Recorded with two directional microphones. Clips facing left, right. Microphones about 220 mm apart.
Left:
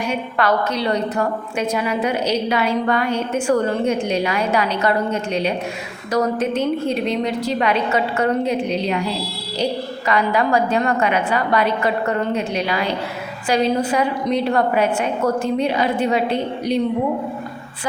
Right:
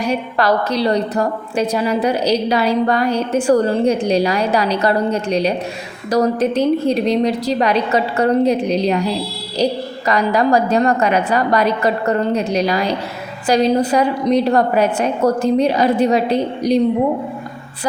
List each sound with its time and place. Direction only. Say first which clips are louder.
0.0 s a woman's voice: right 3 dB; 35° right (ahead or behind)
10.1 s a woman's voice: right 3 dB; 40° right (ahead or behind)